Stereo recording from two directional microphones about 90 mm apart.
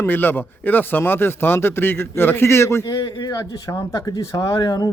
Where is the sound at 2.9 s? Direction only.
45° left (ahead or behind).